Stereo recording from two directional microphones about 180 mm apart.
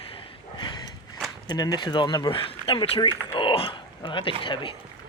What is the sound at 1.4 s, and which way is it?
Speech, 20° left (ahead or behind).